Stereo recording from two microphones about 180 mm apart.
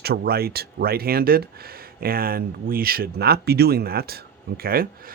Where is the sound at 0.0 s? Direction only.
60° right (ahead or behind).